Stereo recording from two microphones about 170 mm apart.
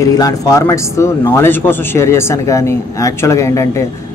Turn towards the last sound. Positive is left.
turn(degrees=15)  # may be behind; listen again after turning